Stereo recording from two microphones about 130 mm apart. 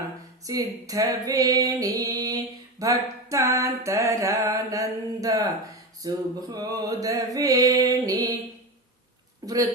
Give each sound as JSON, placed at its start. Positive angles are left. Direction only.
{"t": 0.4, "sound": "female singing", "side_deg": -25}
{"t": 6.0, "sound": "a sound", "side_deg": -30}
{"t": 9.4, "sound": "speech", "side_deg": -25}